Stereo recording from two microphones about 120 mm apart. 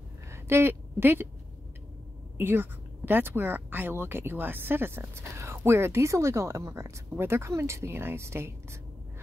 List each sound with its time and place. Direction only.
0.3 s a woman's voice: 20° right (ahead or behind)
2.3 s speech: 20° right (ahead or behind)